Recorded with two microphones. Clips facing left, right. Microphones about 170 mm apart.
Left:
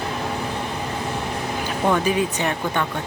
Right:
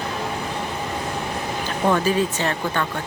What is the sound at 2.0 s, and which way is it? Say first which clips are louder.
Speech: even; 15° left (ahead or behind).